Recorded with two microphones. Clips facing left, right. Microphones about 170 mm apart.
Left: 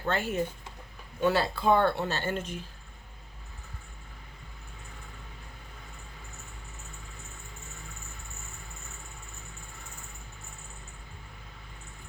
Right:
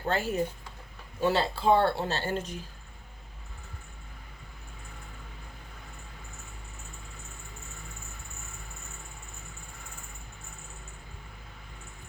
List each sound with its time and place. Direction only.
0.0 s speech: 35° right (ahead or behind)